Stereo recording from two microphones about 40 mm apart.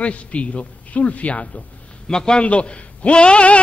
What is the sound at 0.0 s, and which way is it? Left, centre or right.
A man's voice, left.